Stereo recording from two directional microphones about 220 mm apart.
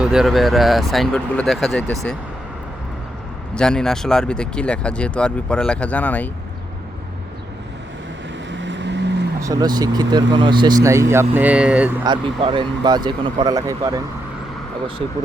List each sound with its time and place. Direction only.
0.0 s speech: 5° right (ahead or behind)
3.5 s speech: 5° left (ahead or behind)
8.4 s vehicle: 55° right (ahead or behind)
9.4 s speech: 15° right (ahead or behind)
12.0 s speech: 20° right (ahead or behind)